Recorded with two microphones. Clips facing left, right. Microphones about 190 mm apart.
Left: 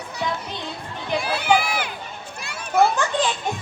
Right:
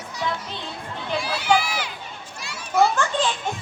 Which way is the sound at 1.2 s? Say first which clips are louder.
Left 1 dB; 55° left (ahead or behind).